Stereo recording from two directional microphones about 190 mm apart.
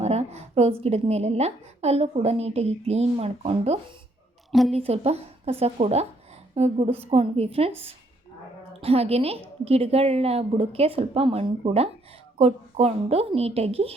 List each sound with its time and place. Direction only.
0.0 s a woman's voice: 35° right (ahead or behind)
4.5 s a woman's voice: centre (ahead or behind)
4.8 s a woman's voice: 35° right (ahead or behind)
8.8 s a woman's voice: 30° right (ahead or behind)